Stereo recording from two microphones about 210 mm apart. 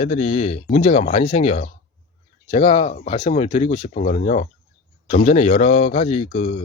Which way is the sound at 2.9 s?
35° left (ahead or behind).